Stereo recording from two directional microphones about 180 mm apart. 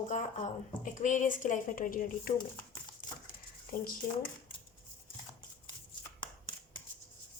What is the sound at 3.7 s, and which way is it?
Speech, 50° left (ahead or behind).